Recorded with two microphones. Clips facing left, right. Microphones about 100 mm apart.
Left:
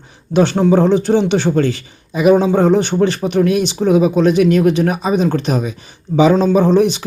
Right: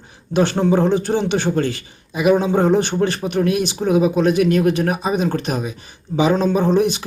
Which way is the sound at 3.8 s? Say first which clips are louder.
Left 4 dB; 35° left (ahead or behind).